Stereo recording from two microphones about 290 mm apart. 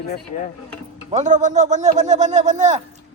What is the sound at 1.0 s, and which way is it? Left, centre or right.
Speech, right.